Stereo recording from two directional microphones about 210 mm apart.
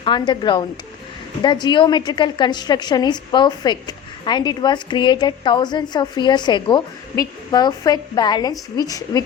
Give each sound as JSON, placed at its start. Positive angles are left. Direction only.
{"t": 0.0, "sound": "a woman's voice", "side_deg": 20}